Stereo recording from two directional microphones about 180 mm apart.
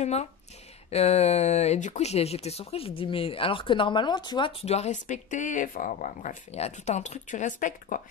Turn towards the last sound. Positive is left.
turn(degrees=45)  # may be behind; listen again after turning